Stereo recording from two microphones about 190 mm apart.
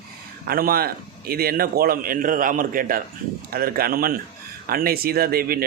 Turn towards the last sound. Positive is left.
turn(degrees=-50)  # may be behind; listen again after turning